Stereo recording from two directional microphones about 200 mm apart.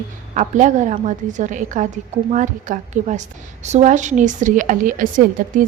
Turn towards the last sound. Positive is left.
turn(degrees=-40)  # may be behind; listen again after turning